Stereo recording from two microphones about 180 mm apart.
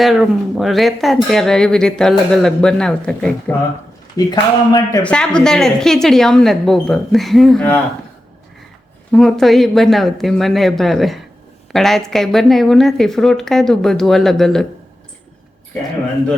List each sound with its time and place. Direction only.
0.0 s speech: centre (ahead or behind)
4.3 s speech: 20° left (ahead or behind)
5.0 s speech: 5° left (ahead or behind)
9.1 s speech: centre (ahead or behind)